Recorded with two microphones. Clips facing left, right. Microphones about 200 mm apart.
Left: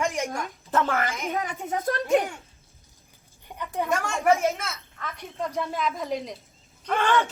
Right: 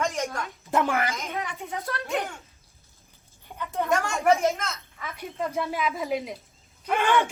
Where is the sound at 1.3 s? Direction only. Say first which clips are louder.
Left 4 dB; 45° left (ahead or behind).